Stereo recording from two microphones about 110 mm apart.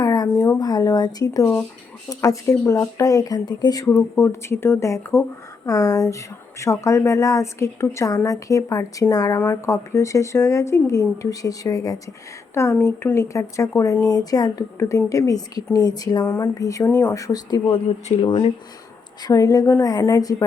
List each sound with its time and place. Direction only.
0.0 s speech: 35° left (ahead or behind)
12.7 s speech: 20° left (ahead or behind); by 16.2 s 35° left (ahead or behind)
16.2 s speech: 20° left (ahead or behind)
16.6 s speech: 30° left (ahead or behind)
18.2 s speech: 50° left (ahead or behind)
19.2 s speech: 30° left (ahead or behind)